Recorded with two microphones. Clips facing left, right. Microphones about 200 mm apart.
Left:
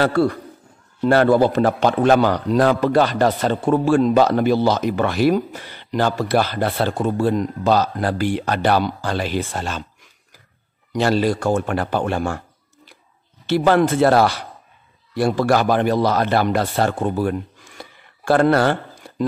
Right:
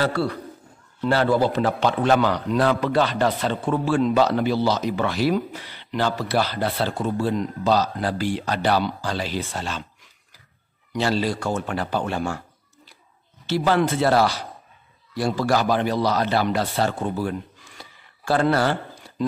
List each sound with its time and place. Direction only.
0.0 s a man's voice: 50° left (ahead or behind)
10.9 s a man's voice: 50° left (ahead or behind)
13.5 s a man's voice: 55° left (ahead or behind)